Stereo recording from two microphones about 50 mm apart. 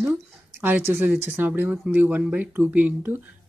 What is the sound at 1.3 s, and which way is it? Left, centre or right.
Speech, right.